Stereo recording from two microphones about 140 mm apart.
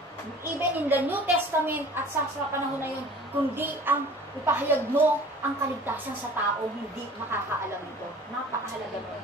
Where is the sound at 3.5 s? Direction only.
15° right (ahead or behind).